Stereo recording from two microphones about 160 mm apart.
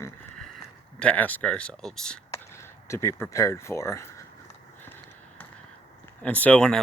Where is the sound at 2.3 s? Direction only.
15° left (ahead or behind).